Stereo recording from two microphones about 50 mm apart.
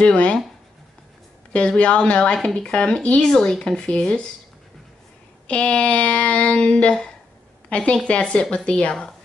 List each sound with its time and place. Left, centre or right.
0.0 s speech: left
1.5 s speech: left
5.5 s speech: left